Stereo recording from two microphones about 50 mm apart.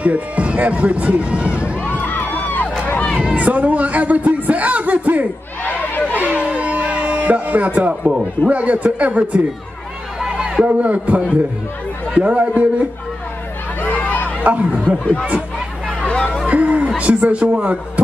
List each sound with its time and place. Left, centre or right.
0.0 s speech: right
1.9 s music: left
3.2 s speech: right
5.7 s crowd: left
6.1 s music: right
8.5 s speech: right
10.2 s a sound: centre
10.6 s speech: right
13.8 s chatter: left
14.4 s speech: right
16.0 s chatter: centre
16.4 s speech: right